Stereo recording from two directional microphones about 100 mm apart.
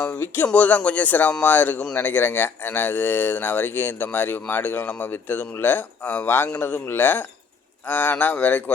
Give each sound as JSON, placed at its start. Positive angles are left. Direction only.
{"t": 0.0, "sound": "speech", "side_deg": 20}